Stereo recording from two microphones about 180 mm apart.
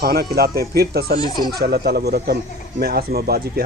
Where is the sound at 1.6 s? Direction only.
60° right (ahead or behind).